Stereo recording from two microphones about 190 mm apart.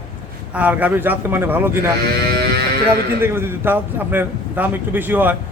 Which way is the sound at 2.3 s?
60° right (ahead or behind).